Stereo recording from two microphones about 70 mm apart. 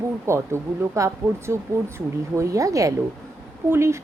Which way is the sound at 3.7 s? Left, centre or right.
Right.